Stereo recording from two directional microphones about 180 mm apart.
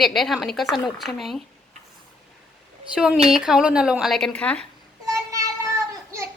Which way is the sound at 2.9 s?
5° right (ahead or behind).